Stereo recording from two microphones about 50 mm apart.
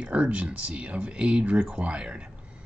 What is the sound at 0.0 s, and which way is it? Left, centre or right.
Speech, right.